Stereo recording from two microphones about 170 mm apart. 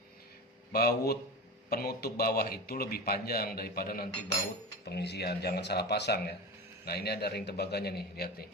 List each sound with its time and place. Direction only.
0.7 s a man's voice: 65° left (ahead or behind)
4.9 s a man's voice: 75° left (ahead or behind)